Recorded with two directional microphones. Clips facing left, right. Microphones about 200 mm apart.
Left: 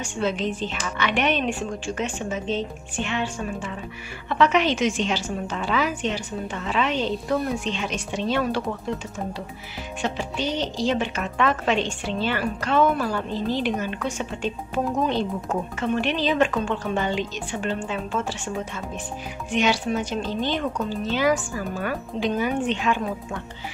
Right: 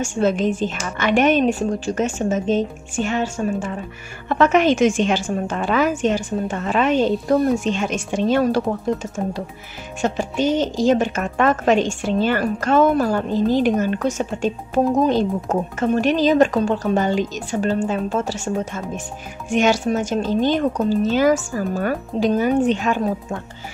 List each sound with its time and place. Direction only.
0.0 s speech: 45° right (ahead or behind)
19.5 s speech: 45° right (ahead or behind)